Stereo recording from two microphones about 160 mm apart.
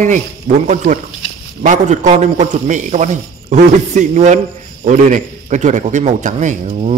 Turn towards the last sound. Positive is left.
turn(degrees=-50)  # may be behind; listen again after turning